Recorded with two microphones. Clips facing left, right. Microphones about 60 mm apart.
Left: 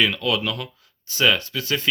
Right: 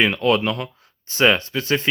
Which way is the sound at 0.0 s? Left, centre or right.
Right.